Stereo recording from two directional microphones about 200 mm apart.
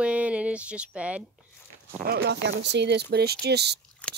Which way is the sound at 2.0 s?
50° right (ahead or behind).